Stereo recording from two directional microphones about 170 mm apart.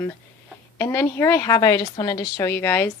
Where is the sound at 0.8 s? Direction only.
15° left (ahead or behind).